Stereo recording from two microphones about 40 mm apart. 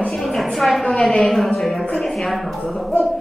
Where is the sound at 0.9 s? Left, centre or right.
Centre.